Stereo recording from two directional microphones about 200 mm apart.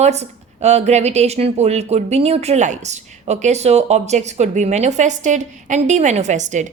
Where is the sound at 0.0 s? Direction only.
35° right (ahead or behind).